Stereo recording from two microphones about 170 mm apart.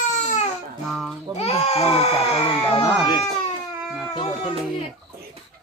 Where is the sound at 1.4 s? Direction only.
35° left (ahead or behind).